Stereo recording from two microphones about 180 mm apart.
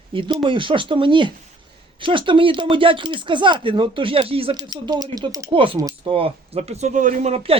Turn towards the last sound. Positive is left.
turn(degrees=-35)  # may be behind; listen again after turning